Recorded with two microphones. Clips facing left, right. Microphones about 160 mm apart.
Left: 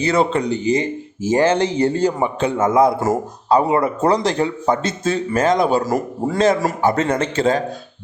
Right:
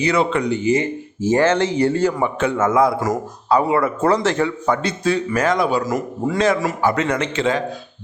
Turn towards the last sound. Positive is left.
turn(degrees=35)  # may be behind; listen again after turning